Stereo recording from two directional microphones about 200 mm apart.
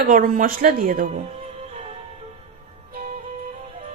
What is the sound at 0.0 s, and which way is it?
A woman's voice, 45° right (ahead or behind).